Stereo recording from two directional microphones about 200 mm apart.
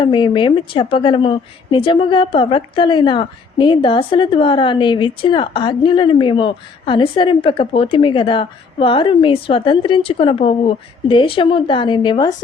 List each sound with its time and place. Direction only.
0.0 s a woman's voice: 25° left (ahead or behind)